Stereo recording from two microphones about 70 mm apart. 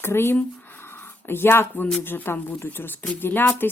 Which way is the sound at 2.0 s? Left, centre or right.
Left.